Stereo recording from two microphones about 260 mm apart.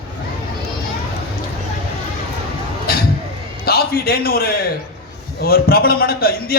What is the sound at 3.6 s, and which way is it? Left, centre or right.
A man's voice, left.